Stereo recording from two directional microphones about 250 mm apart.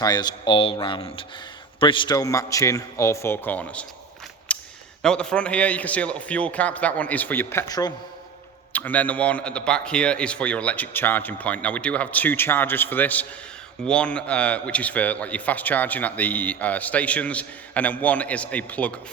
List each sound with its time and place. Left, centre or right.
0.0 s a man's voice: centre
4.5 s a sound: centre
5.0 s a man's voice: centre